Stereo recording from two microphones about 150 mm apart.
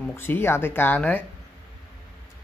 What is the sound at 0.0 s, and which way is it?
Speech, 15° left (ahead or behind).